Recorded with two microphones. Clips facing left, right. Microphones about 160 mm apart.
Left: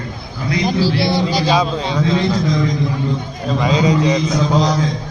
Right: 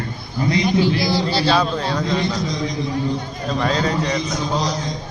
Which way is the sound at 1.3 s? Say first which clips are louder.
Left 2 dB; 15° left (ahead or behind).